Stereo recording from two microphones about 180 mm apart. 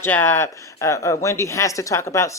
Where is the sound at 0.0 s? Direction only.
10° left (ahead or behind).